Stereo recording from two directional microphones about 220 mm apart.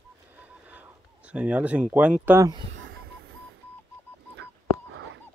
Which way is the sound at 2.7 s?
60° right (ahead or behind).